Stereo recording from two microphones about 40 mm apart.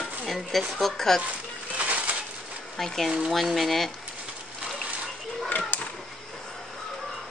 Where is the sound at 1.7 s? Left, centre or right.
Right.